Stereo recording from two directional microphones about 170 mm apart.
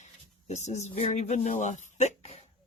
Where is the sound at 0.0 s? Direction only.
40° left (ahead or behind).